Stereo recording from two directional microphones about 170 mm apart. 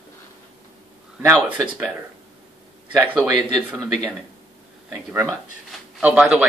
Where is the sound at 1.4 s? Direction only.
10° right (ahead or behind).